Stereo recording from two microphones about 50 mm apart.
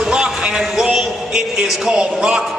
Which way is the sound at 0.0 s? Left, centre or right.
Centre.